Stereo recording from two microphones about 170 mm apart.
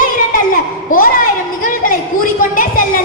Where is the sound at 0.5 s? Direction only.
55° left (ahead or behind).